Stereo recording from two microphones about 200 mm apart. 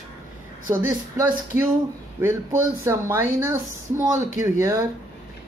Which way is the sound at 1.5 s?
15° right (ahead or behind).